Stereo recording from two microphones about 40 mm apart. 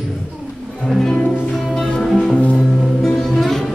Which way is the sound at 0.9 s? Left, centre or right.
Centre.